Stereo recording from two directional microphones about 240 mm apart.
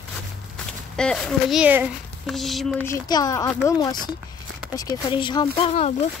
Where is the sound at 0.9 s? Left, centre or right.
Centre.